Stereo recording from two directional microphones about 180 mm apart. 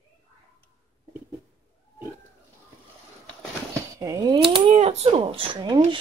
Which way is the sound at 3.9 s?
15° right (ahead or behind).